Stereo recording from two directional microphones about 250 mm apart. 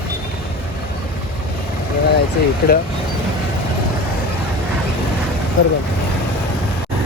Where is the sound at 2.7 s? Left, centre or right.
Left.